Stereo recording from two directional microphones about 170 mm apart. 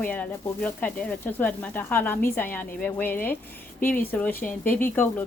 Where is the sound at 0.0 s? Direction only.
10° left (ahead or behind).